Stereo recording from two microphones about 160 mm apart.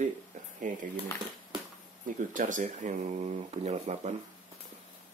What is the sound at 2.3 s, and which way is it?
Speech, 55° right (ahead or behind).